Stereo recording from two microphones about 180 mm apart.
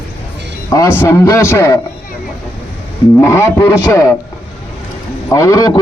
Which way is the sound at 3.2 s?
15° left (ahead or behind).